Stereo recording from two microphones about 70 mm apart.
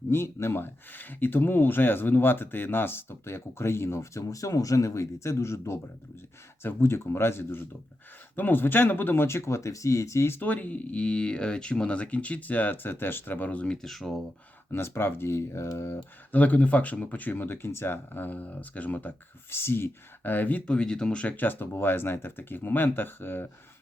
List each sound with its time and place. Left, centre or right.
0.1 s speech: left; by 13.7 s centre
13.8 s speech: centre
14.7 s speech: left
16.3 s speech: left